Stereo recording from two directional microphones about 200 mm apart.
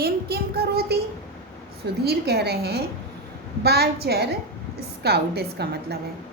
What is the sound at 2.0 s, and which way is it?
A woman's voice, 55° right (ahead or behind).